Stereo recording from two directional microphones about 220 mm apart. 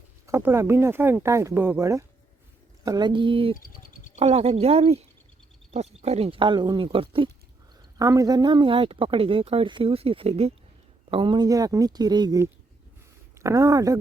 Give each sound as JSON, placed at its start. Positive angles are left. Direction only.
{"t": 0.3, "sound": "speech", "side_deg": -10}
{"t": 3.6, "sound": "bird", "side_deg": 40}
{"t": 4.2, "sound": "speech", "side_deg": -30}